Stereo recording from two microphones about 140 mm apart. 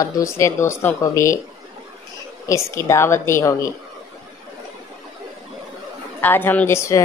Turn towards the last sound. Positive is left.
turn(degrees=20)  # may be behind; listen again after turning